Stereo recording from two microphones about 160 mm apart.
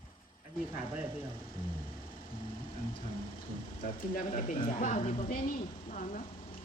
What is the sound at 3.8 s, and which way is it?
A woman's voice, 60° left (ahead or behind).